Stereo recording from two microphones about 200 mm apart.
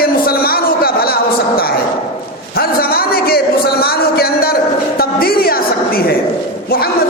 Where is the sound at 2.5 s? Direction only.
50° left (ahead or behind).